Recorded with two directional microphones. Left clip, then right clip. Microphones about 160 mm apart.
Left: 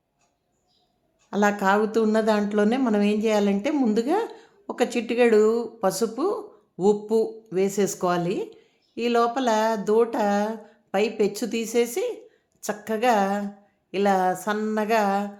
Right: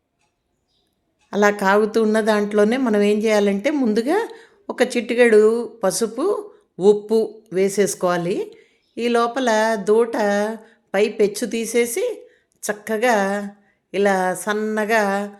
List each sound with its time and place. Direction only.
1.3 s a woman's voice: 15° right (ahead or behind)